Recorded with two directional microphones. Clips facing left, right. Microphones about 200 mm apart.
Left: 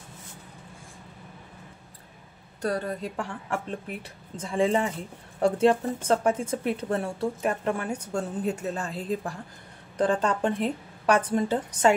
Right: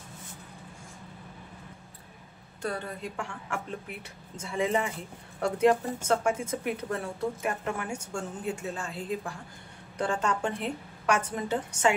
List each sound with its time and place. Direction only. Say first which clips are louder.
2.6 s speech: left 5 dB; 40° left (ahead or behind)